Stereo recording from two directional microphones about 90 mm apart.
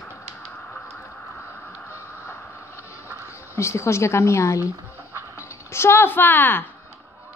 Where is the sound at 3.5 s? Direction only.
35° left (ahead or behind).